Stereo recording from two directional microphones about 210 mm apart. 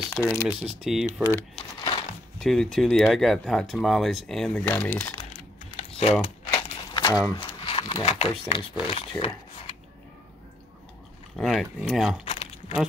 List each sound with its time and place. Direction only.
0.1 s speech: 10° left (ahead or behind)
0.7 s speech: centre (ahead or behind)
1.9 s a sound: 25° left (ahead or behind)
2.3 s speech: centre (ahead or behind)
5.7 s typing: 30° left (ahead or behind)
6.2 s crumpling: 20° left (ahead or behind)
7.3 s a sound: 25° left (ahead or behind)
8.5 s speech: 25° left (ahead or behind)
11.3 s speech: centre (ahead or behind)
12.3 s a sound: 25° left (ahead or behind)